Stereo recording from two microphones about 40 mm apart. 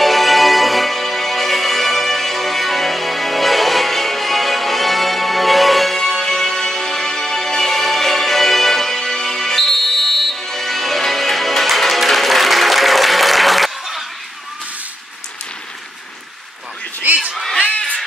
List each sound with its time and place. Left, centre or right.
0.0 s music: centre
17.0 s a sound: right
17.7 s cat: left